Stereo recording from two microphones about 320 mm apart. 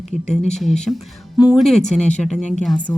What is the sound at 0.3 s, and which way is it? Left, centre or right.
Speech, left.